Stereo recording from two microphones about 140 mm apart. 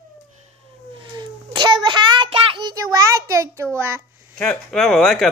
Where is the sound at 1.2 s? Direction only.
30° right (ahead or behind).